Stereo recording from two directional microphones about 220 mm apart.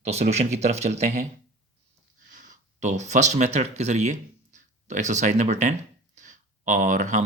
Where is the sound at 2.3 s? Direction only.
35° right (ahead or behind).